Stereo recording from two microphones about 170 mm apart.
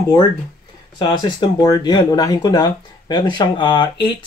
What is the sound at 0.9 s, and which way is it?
Speech, 25° left (ahead or behind).